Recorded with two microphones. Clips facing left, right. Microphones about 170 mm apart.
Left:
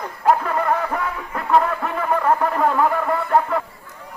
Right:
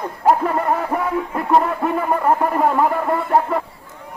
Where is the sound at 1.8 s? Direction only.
15° right (ahead or behind).